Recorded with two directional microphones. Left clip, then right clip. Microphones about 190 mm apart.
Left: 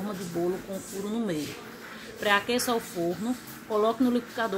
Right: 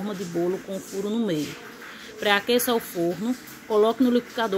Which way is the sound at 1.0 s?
10° right (ahead or behind).